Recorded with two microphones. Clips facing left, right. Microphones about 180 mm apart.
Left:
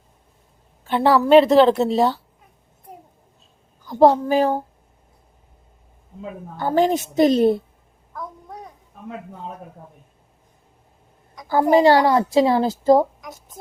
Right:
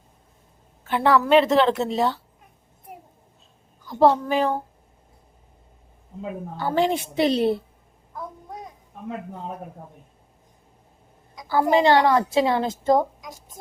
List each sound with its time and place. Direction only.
0.9 s a woman's voice: 30° left (ahead or behind)
3.8 s a woman's voice: 40° left (ahead or behind)
6.6 s a woman's voice: 45° left (ahead or behind)
11.4 s a woman's voice: 40° left (ahead or behind)
13.2 s speech: 20° right (ahead or behind)